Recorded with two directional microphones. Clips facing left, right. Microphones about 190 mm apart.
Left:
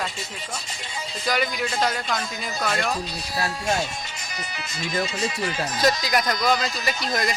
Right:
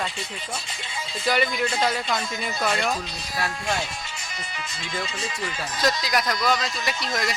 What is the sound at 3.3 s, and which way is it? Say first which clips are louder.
Speech: left 2 dB; 35° left (ahead or behind).